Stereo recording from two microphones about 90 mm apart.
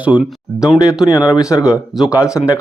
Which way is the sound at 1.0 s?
45° left (ahead or behind).